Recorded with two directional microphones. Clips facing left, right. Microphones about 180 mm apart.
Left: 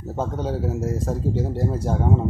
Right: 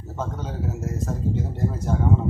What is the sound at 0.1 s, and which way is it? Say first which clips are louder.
Speech: left 5 dB; 35° left (ahead or behind).